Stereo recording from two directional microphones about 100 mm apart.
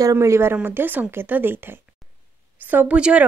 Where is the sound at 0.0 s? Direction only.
30° right (ahead or behind).